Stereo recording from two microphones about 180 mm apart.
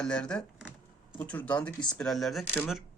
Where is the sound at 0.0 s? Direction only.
5° left (ahead or behind).